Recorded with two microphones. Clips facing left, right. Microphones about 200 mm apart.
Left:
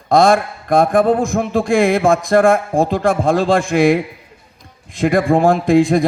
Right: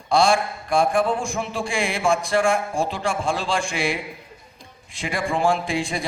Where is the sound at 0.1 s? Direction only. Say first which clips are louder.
Left 7 dB; 55° left (ahead or behind).